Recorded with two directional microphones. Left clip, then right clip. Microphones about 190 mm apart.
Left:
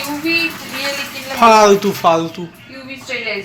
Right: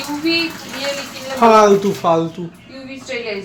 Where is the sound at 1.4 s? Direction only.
10° right (ahead or behind).